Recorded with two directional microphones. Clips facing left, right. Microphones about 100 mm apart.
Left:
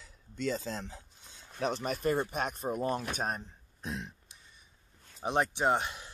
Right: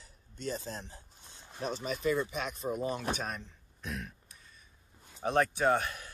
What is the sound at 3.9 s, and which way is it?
Throat clearing, 25° left (ahead or behind).